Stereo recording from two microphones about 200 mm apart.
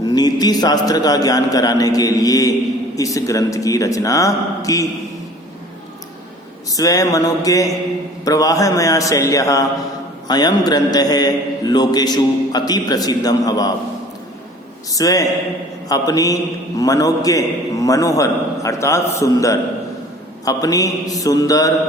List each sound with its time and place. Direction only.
0.0 s a man's voice: 20° left (ahead or behind)
6.7 s a man's voice: 15° left (ahead or behind)
14.9 s a man's voice: 15° left (ahead or behind)